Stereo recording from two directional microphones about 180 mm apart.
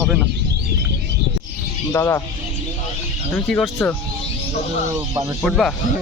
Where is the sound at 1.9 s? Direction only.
15° left (ahead or behind).